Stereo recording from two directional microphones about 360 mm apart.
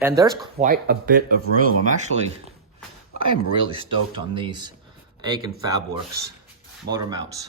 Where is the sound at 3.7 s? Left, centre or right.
Centre.